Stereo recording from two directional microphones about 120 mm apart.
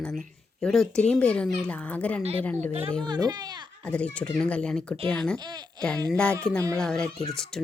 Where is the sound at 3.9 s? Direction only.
10° left (ahead or behind).